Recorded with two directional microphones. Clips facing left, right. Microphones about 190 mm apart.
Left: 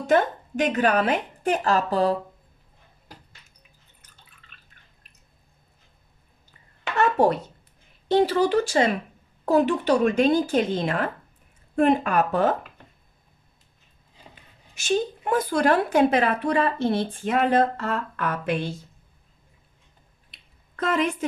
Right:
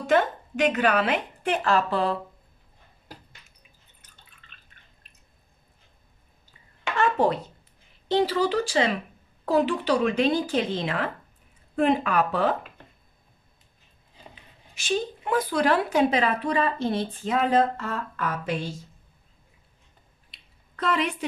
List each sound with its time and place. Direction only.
0.1 s a woman's voice: 40° left (ahead or behind)
8.1 s speech: 50° left (ahead or behind)
14.8 s a woman's voice: 45° left (ahead or behind)
20.2 s a sound: 45° left (ahead or behind)